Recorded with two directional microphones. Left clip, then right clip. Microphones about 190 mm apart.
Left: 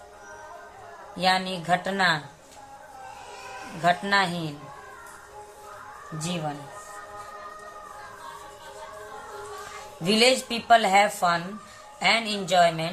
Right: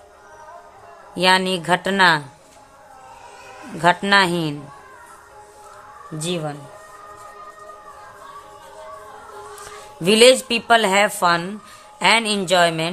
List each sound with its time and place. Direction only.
1.1 s a woman's voice: 45° right (ahead or behind)
3.8 s a woman's voice: 45° right (ahead or behind)
6.1 s a woman's voice: 55° right (ahead or behind)
10.0 s a woman's voice: 55° right (ahead or behind)